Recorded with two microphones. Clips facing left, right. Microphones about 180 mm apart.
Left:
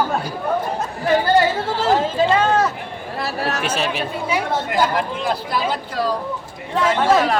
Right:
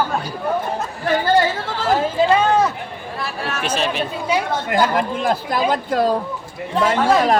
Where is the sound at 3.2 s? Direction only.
40° left (ahead or behind).